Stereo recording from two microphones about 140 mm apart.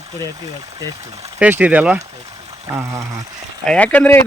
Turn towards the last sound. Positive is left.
turn(degrees=10)  # may be behind; listen again after turning